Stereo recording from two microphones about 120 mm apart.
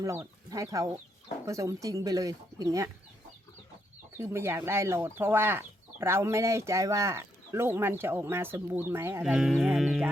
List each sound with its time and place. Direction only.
0.0 s speech: 25° right (ahead or behind)
4.2 s speech: 20° right (ahead or behind)
9.2 s speech: 5° right (ahead or behind)